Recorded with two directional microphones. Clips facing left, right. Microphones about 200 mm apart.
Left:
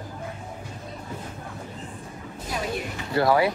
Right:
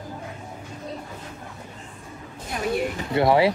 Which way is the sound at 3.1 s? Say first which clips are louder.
Right 2 dB; 25° right (ahead or behind).